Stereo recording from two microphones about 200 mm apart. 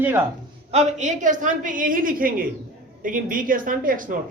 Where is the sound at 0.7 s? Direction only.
35° right (ahead or behind).